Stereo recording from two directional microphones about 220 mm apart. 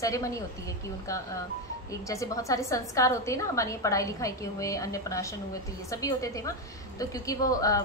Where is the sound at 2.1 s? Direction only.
15° left (ahead or behind).